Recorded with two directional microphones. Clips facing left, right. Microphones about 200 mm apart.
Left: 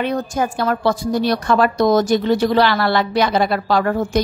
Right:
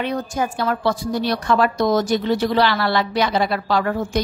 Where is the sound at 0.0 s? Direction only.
45° left (ahead or behind).